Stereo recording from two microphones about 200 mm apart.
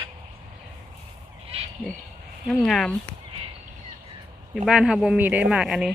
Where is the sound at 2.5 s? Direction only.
Centre (ahead or behind).